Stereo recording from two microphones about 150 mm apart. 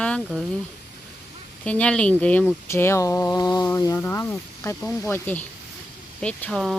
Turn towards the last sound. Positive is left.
turn(degrees=5)  # may be behind; listen again after turning